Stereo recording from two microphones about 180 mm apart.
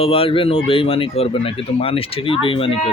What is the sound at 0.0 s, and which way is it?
Speech, 30° left (ahead or behind).